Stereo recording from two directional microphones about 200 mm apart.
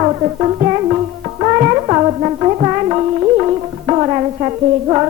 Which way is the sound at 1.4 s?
25° right (ahead or behind).